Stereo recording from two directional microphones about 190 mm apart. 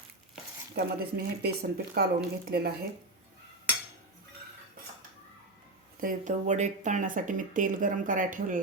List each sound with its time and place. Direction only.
0.8 s speech: 55° right (ahead or behind)
6.0 s speech: 45° right (ahead or behind)